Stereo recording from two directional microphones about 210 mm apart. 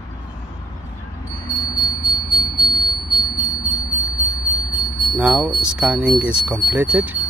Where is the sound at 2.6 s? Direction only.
20° left (ahead or behind).